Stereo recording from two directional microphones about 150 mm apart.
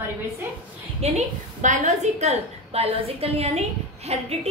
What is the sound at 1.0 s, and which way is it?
A woman's voice, 50° right (ahead or behind).